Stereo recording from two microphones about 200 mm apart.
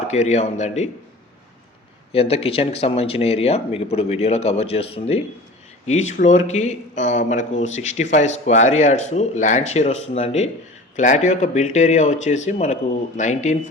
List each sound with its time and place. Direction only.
0.1 s speech: 35° left (ahead or behind)
2.1 s speech: 30° left (ahead or behind)